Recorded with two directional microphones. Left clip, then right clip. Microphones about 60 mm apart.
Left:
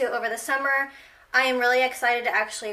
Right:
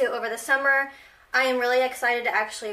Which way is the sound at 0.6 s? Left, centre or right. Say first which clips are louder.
Right 2 dB; centre.